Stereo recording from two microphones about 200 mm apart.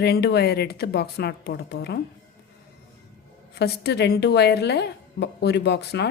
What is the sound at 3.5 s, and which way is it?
A woman's voice, 55° left (ahead or behind).